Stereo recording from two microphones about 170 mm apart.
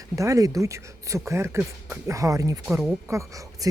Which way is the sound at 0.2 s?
20° right (ahead or behind).